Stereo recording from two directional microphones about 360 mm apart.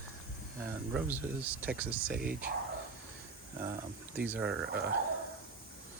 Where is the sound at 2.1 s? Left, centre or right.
Right.